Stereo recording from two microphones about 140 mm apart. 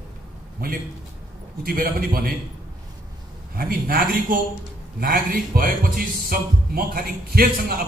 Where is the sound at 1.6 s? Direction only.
90° right.